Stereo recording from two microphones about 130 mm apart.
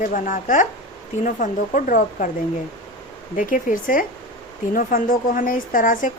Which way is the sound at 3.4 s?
90° left.